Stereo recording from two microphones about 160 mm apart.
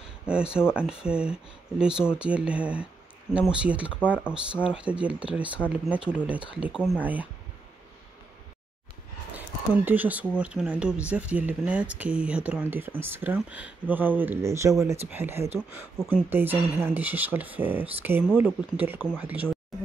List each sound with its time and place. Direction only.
0.3 s speech: 5° right (ahead or behind)
4.0 s speech: 10° left (ahead or behind)
4.6 s speech: 5° right (ahead or behind)
9.8 s speech: 10° right (ahead or behind)